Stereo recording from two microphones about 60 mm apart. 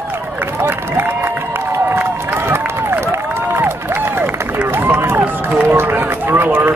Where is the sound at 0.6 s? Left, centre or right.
Right.